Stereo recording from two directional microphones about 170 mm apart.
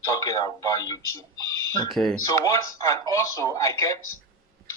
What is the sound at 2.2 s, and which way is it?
Speech, 20° left (ahead or behind).